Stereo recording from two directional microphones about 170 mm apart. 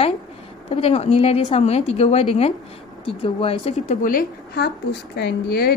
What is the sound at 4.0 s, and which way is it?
A woman's voice, 55° left (ahead or behind).